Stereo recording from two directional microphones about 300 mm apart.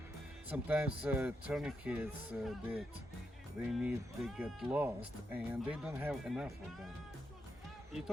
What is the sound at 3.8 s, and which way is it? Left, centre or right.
A man's voice, centre.